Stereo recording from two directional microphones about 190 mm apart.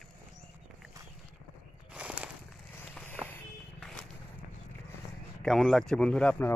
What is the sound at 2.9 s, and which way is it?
Vehicle, 10° left (ahead or behind).